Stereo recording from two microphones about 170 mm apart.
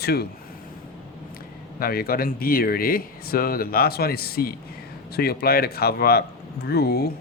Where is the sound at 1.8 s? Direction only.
60° left (ahead or behind).